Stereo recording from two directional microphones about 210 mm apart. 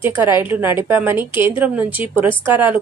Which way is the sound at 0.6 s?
10° right (ahead or behind).